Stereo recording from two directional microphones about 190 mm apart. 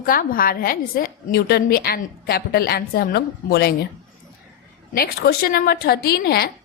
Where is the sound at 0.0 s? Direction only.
50° left (ahead or behind).